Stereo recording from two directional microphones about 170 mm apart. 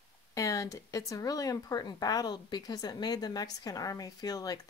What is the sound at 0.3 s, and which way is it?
Speech, 20° left (ahead or behind).